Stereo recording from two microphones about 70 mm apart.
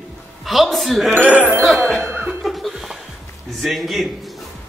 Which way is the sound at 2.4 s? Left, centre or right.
Centre.